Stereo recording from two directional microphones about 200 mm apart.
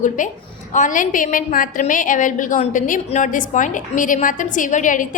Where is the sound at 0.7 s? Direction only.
40° left (ahead or behind).